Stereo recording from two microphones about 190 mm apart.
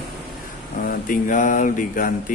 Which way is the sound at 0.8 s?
45° left (ahead or behind).